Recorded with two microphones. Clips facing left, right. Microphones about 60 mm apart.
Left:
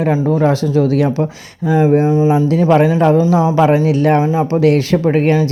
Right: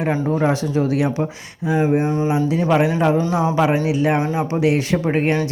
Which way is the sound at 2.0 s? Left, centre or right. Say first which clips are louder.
Left 7 dB; left.